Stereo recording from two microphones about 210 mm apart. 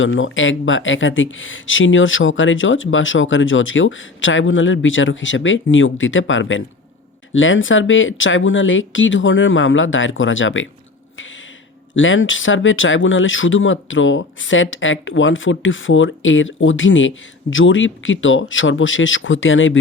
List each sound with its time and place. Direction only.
0.0 s speech: 65° left (ahead or behind)
11.9 s speech: 65° left (ahead or behind)